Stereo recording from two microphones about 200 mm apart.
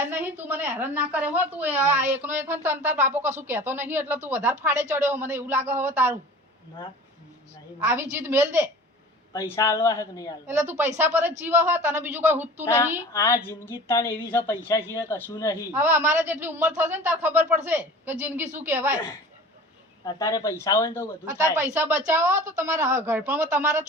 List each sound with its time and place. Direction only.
0.0 s a woman's voice: 10° right (ahead or behind)
8.1 s a woman's voice: 10° right (ahead or behind)
9.3 s a woman's voice: 15° left (ahead or behind)
10.9 s a woman's voice: 10° right (ahead or behind)
12.6 s a woman's voice: 15° left (ahead or behind)
15.7 s a woman's voice: 10° right (ahead or behind)
20.1 s a woman's voice: 20° left (ahead or behind)
21.5 s a woman's voice: 10° right (ahead or behind)
22.4 s a woman's voice: 40° right (ahead or behind)
22.9 s a woman's voice: 10° right (ahead or behind)